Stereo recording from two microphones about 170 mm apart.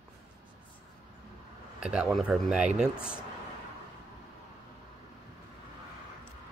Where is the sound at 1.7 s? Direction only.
5° right (ahead or behind).